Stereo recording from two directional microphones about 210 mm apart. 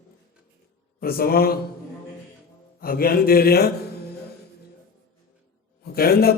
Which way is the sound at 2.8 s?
45° left (ahead or behind).